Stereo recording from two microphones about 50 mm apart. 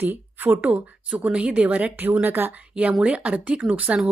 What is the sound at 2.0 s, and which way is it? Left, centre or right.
Speech, right.